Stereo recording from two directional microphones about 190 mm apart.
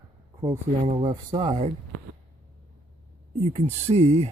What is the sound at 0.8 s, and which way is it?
Speech, 35° right (ahead or behind).